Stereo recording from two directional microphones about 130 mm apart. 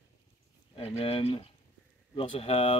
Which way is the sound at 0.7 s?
50° left (ahead or behind).